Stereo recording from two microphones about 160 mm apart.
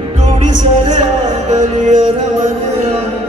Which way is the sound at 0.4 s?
50° right (ahead or behind).